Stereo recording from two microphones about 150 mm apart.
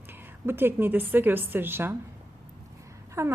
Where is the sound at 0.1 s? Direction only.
15° right (ahead or behind).